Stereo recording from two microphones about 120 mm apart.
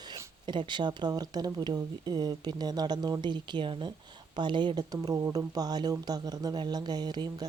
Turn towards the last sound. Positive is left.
turn(degrees=-35)  # may be behind; listen again after turning